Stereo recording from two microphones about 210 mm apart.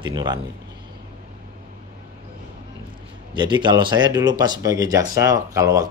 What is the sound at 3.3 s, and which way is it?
Speech, 20° right (ahead or behind).